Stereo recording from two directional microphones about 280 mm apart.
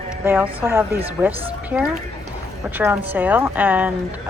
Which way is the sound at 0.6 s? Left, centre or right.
Centre.